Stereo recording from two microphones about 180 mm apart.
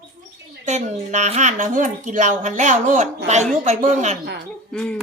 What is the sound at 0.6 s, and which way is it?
Speech, 40° right (ahead or behind).